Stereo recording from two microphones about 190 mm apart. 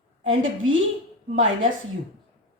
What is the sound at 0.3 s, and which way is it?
Speech, 90° right.